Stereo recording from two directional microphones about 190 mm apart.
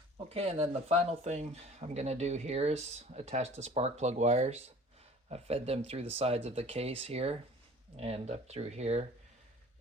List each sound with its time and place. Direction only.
0.3 s speech: 35° right (ahead or behind)